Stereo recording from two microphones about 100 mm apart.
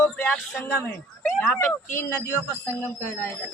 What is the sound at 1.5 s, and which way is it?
Speech, 20° left (ahead or behind).